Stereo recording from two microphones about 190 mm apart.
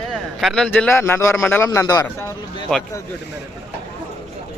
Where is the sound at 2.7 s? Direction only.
5° left (ahead or behind).